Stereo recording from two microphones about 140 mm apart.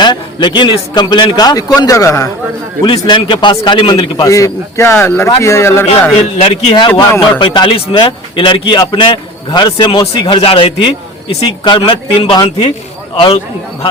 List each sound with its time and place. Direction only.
0.0 s a man's voice: 35° left (ahead or behind)
2.8 s a man's voice: 35° left (ahead or behind); by 5.8 s 20° left (ahead or behind)
6.4 s a man's voice: 50° left (ahead or behind)
6.7 s a man's voice: 35° left (ahead or behind)